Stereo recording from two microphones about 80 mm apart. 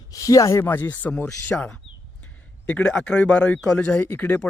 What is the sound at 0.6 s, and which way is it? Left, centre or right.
A man's voice, left.